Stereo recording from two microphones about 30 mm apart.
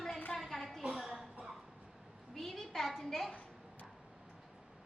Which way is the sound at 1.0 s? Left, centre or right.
Centre.